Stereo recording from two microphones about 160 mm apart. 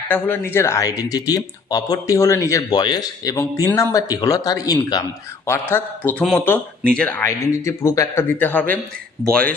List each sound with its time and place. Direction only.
0.1 s speech: 15° left (ahead or behind)